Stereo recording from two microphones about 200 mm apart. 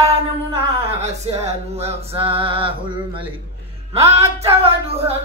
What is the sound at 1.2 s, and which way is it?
Singing, 30° right (ahead or behind).